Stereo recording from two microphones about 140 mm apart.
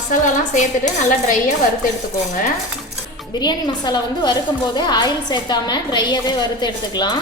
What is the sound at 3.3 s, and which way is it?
A woman's voice, 30° left (ahead or behind).